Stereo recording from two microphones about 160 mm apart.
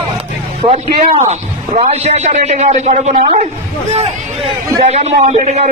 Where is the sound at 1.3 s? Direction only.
45° right (ahead or behind).